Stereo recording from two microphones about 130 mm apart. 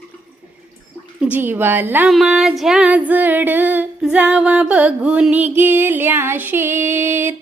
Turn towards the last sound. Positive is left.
turn(degrees=-20)  # may be behind; listen again after turning